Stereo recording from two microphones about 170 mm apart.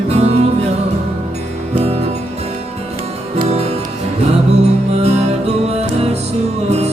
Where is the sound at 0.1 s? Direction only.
40° right (ahead or behind).